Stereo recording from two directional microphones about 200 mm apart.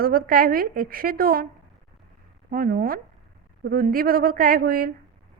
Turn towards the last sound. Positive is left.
turn(degrees=-45)  # may be behind; listen again after turning